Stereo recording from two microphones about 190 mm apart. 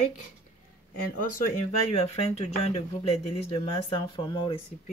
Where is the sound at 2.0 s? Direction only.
35° left (ahead or behind).